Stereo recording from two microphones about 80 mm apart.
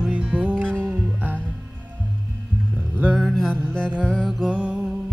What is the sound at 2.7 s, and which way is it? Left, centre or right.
Music, centre.